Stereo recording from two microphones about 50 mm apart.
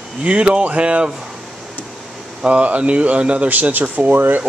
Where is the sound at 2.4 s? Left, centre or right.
Right.